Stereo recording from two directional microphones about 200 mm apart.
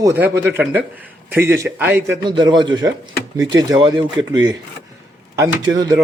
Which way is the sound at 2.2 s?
25° right (ahead or behind).